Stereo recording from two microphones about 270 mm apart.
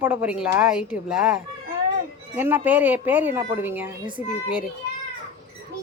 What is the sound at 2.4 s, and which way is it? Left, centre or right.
Speech, centre.